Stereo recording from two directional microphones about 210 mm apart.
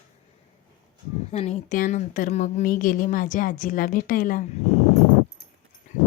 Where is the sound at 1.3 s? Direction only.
30° left (ahead or behind).